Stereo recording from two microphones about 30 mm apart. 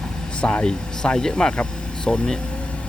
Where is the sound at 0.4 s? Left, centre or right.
Left.